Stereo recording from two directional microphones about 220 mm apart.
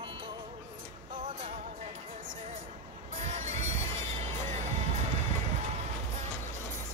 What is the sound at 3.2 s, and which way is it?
Music, 30° right (ahead or behind).